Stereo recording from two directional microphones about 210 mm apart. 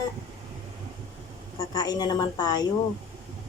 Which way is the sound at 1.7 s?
20° left (ahead or behind).